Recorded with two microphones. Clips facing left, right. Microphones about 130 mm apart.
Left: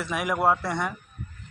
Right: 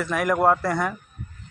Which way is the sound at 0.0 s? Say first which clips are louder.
Right 4 dB; centre (ahead or behind).